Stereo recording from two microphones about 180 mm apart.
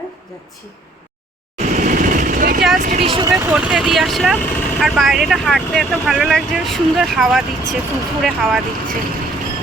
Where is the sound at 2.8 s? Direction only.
45° right (ahead or behind).